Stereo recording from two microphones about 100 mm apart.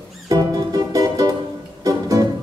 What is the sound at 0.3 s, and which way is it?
Music, 35° right (ahead or behind).